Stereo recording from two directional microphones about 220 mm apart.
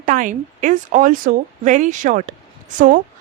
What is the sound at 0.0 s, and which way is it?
A woman's voice, 35° right (ahead or behind).